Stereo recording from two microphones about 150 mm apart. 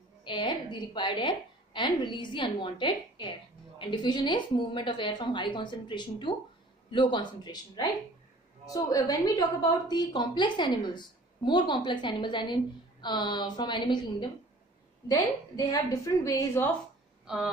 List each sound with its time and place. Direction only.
0.2 s a woman's voice: 30° left (ahead or behind)